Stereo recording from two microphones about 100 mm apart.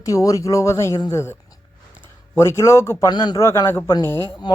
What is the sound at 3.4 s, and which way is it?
Speech, 30° left (ahead or behind).